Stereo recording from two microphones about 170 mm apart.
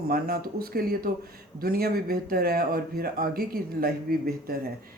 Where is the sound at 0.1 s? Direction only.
60° right (ahead or behind).